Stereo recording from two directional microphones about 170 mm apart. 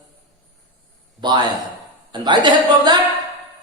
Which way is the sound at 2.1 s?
25° right (ahead or behind).